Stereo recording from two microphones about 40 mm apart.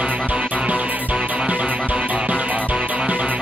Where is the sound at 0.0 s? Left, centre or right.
Right.